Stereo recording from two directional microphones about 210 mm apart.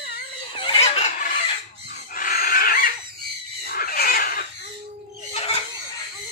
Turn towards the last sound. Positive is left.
turn(degrees=30)  # may be behind; listen again after turning